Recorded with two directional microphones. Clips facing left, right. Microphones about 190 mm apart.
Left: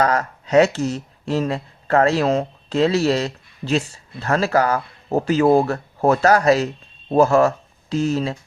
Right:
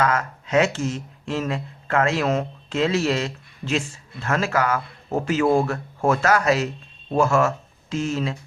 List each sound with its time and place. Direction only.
0.0 s speech: 35° left (ahead or behind)